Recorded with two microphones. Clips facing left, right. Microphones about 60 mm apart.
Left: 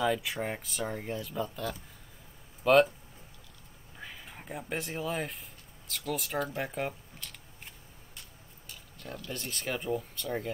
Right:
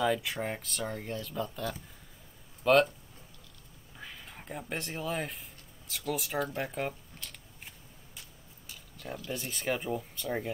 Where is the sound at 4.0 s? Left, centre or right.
Centre.